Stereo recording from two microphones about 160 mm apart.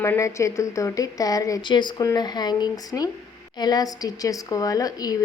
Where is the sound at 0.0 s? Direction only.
20° left (ahead or behind).